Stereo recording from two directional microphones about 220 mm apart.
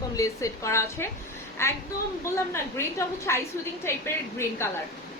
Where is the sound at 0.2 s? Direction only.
15° left (ahead or behind).